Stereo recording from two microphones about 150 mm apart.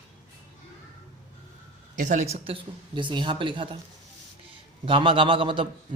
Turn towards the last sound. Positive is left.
turn(degrees=-35)  # may be behind; listen again after turning